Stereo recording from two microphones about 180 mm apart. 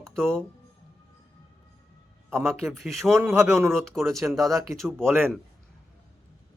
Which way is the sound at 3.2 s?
15° right (ahead or behind).